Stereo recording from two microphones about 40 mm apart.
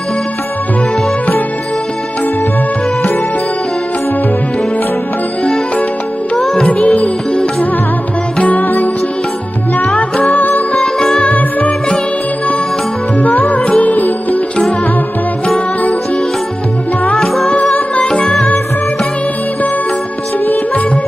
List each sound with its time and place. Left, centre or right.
6.3 s music: centre
6.7 s music: left
8.4 s music: left
9.9 s music: left
13.4 s music: left
17.2 s music: centre
17.6 s music: left
18.1 s music: centre
20.4 s music: left